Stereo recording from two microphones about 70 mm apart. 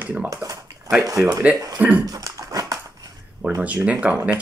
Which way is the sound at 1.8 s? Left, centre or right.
Right.